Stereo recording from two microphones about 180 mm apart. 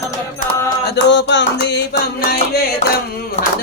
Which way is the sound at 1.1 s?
80° left.